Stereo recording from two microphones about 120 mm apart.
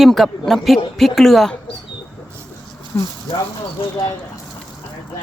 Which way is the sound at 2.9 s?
25° left (ahead or behind).